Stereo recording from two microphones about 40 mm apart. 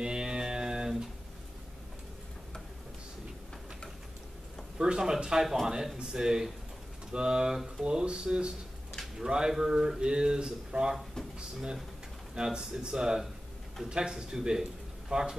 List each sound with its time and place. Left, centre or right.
0.0 s music: centre
4.7 s speech: centre